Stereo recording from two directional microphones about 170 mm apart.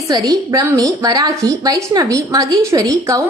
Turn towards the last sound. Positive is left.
turn(degrees=-20)  # may be behind; listen again after turning